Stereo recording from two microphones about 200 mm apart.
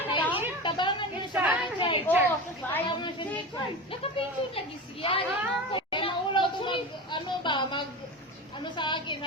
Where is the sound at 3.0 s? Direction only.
25° left (ahead or behind).